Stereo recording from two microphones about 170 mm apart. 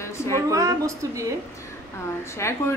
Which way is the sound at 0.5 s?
20° right (ahead or behind).